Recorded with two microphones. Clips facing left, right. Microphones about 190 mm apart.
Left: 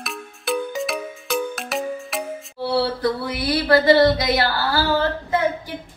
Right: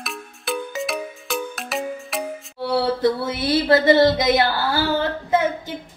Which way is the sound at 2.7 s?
25° right (ahead or behind).